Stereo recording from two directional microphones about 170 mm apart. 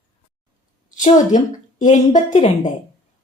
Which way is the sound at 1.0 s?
45° left (ahead or behind).